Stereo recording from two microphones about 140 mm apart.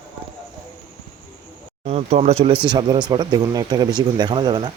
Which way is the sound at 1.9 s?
50° right (ahead or behind).